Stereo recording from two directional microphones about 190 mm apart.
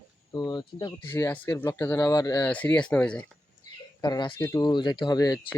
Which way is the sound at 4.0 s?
20° left (ahead or behind).